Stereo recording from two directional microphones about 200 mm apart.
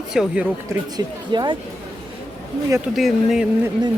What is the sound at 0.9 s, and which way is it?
Speech, 20° right (ahead or behind).